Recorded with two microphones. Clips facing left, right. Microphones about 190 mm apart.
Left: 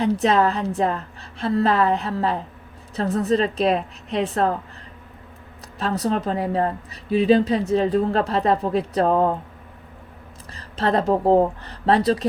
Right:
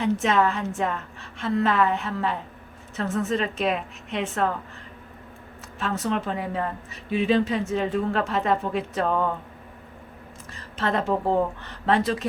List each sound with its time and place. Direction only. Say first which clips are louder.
0.0 s a woman's voice: left 3 dB; 35° left (ahead or behind)
5.8 s a woman's voice: left 4 dB; 35° left (ahead or behind)
10.5 s a woman's voice: left 5 dB; 35° left (ahead or behind)